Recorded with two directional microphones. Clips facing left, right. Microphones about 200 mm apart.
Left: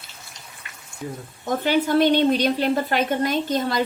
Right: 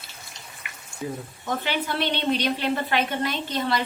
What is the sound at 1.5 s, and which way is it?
A woman's voice, 45° left (ahead or behind).